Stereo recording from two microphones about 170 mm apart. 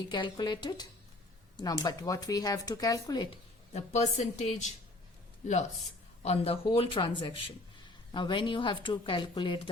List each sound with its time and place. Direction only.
0.1 s speech: 25° left (ahead or behind)
3.7 s speech: 40° left (ahead or behind)
6.2 s speech: 35° left (ahead or behind)